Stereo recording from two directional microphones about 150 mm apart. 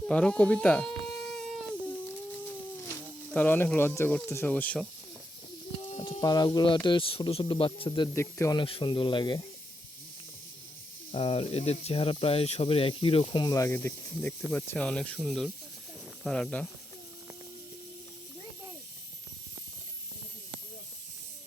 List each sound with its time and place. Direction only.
0.1 s speech: 5° left (ahead or behind)
3.3 s speech: 10° left (ahead or behind)
6.2 s speech: 25° left (ahead or behind)
8.1 s speech: 20° left (ahead or behind)
8.5 s speech: 35° left (ahead or behind)
11.1 s speech: 40° left (ahead or behind); by 16.6 s 5° left (ahead or behind)